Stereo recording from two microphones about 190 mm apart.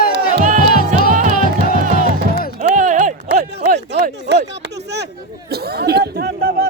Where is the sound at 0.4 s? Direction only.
40° right (ahead or behind).